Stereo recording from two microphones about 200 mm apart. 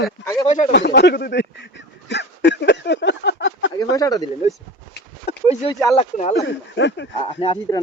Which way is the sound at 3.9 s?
15° left (ahead or behind).